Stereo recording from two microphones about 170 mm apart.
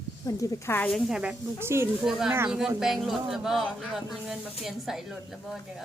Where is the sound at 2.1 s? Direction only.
Centre (ahead or behind).